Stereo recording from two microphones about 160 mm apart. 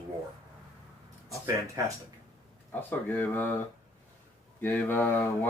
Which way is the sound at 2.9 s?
10° left (ahead or behind).